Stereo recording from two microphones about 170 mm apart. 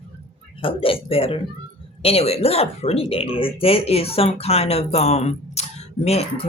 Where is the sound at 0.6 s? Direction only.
35° left (ahead or behind).